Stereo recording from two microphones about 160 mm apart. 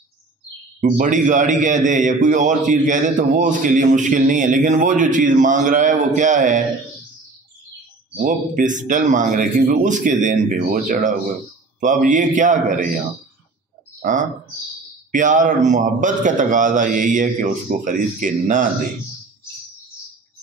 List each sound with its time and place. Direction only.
0.7 s a man's voice: 55° right (ahead or behind)
8.2 s a man's voice: 55° right (ahead or behind)
15.0 s a man's voice: 55° right (ahead or behind)